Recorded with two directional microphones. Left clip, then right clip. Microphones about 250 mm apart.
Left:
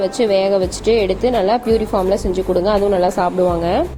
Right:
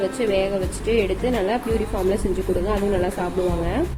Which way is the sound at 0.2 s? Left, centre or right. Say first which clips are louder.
Left 9 dB; left.